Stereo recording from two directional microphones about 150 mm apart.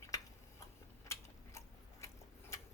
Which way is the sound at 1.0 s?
20° left (ahead or behind).